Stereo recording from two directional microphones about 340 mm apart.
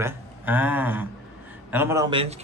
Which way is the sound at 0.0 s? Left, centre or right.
Centre.